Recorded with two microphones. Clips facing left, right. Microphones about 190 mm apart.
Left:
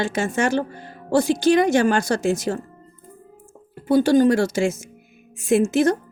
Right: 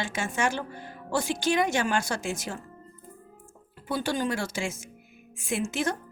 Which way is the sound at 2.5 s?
55° left (ahead or behind).